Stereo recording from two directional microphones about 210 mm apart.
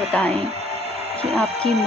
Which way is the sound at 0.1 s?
5° left (ahead or behind).